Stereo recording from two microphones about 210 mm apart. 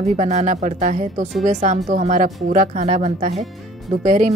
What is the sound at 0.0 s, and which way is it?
Speech, 30° right (ahead or behind).